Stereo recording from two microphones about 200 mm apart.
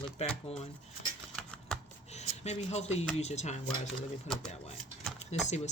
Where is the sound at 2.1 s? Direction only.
35° left (ahead or behind).